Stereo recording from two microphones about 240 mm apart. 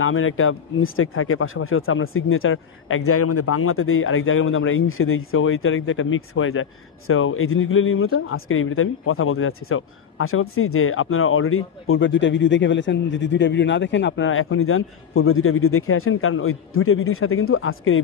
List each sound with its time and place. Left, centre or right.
0.0 s speech: left